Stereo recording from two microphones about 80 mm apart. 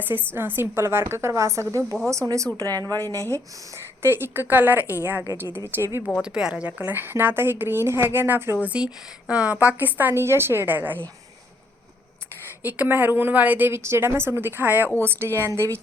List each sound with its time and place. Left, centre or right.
0.0 s a woman's voice: right
3.1 s a woman's voice: right
4.0 s a woman's voice: right
6.2 s a woman's voice: centre; by 8.5 s right
8.6 s a woman's voice: centre
12.6 s a woman's voice: right